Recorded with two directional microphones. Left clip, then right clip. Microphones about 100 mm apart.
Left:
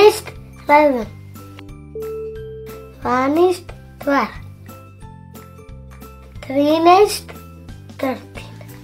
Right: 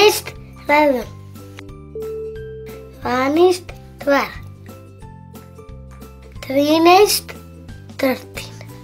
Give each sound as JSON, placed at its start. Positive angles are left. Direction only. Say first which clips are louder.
{"t": 0.0, "sound": "music", "louder": "left 2 dB", "side_deg": 10}
{"t": 2.0, "sound": "music", "louder": "even", "side_deg": 0}
{"t": 3.0, "sound": "a child's voice", "louder": "even", "side_deg": 10}
{"t": 6.4, "sound": "a child's voice", "louder": "even", "side_deg": 0}
{"t": 8.0, "sound": "speech", "louder": "right 4 dB", "side_deg": -20}